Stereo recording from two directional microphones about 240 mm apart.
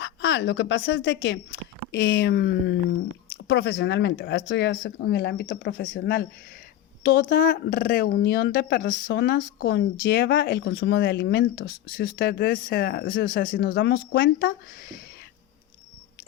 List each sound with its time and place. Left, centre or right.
0.0 s a woman's voice: left